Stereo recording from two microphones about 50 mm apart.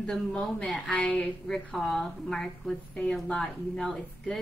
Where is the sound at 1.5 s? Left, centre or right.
Centre.